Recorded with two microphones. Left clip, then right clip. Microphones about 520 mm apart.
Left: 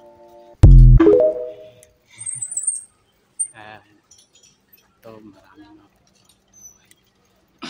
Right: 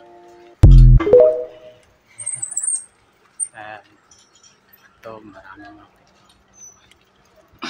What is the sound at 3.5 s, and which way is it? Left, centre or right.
Keys jangling, left.